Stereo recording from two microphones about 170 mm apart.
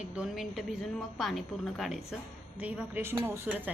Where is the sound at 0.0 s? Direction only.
5° right (ahead or behind).